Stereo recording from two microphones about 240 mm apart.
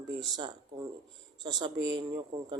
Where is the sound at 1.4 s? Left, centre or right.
Centre.